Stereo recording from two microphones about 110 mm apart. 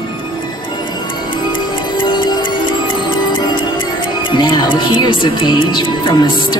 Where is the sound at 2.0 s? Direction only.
40° left (ahead or behind).